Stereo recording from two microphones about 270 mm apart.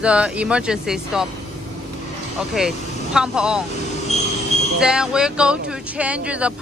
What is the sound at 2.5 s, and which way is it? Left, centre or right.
Speech, centre.